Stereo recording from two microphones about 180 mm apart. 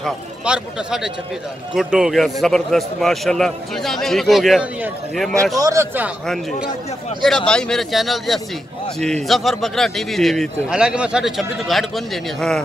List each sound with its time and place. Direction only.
0.0 s a man's voice: 5° right (ahead or behind)
5.6 s a man's voice: 15° right (ahead or behind)
6.2 s a man's voice: centre (ahead or behind)